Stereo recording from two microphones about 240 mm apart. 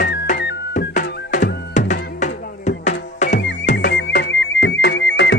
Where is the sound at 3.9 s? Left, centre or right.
Left.